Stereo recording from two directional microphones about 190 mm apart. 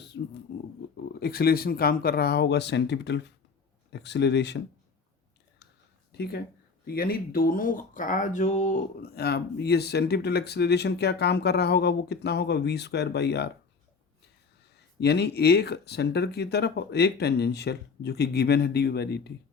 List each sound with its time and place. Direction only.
0.1 s a sound: 70° left (ahead or behind)
1.2 s speech: 55° left (ahead or behind)
6.1 s speech: 55° left (ahead or behind); by 8.8 s 40° left (ahead or behind)
9.0 s speech: 55° left (ahead or behind)
14.9 s speech: 60° left (ahead or behind)